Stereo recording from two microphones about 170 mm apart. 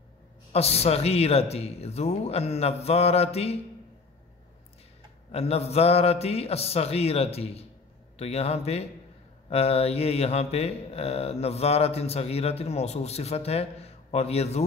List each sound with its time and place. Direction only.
0.5 s mantra: 35° left (ahead or behind)
5.3 s mantra: 35° left (ahead or behind)